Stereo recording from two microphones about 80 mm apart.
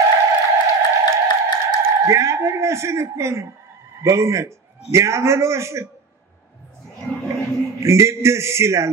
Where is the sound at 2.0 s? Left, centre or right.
Right.